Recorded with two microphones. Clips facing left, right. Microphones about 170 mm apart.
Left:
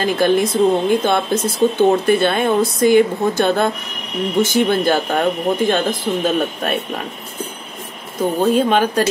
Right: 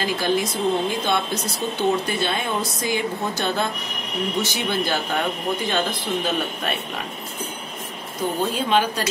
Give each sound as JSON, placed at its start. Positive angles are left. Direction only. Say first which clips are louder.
{"t": 0.0, "sound": "speech", "louder": "left 7 dB", "side_deg": 55}
{"t": 8.2, "sound": "speech", "louder": "left 8 dB", "side_deg": 50}